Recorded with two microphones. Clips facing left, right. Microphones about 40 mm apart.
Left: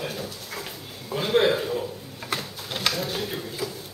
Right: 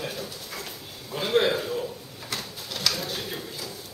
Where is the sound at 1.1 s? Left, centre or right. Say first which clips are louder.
Left 2 dB; centre.